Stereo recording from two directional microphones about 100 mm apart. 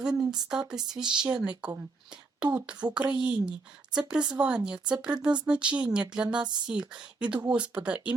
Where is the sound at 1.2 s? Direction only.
10° right (ahead or behind).